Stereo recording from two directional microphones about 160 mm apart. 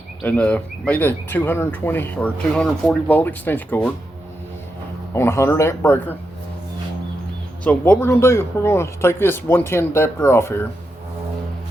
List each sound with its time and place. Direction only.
0.2 s speech: 10° left (ahead or behind)
5.1 s speech: 15° left (ahead or behind)
7.6 s speech: 10° left (ahead or behind)